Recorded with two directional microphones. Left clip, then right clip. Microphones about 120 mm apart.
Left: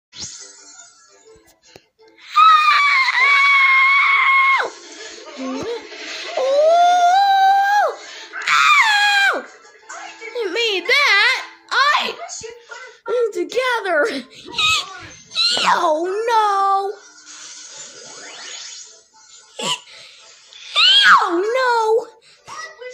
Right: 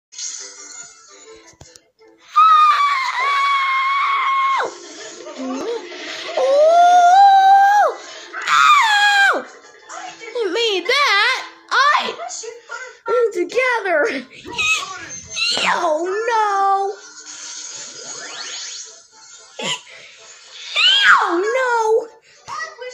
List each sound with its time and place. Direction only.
2.3 s screaming: centre (ahead or behind)
6.3 s a sound: centre (ahead or behind)
10.0 s music: 5° right (ahead or behind)
10.9 s a sound: centre (ahead or behind); by 14.9 s 30° left (ahead or behind)
15.3 s cat: 30° left (ahead or behind)
19.5 s cough: 30° left (ahead or behind)
20.7 s wail: 30° left (ahead or behind)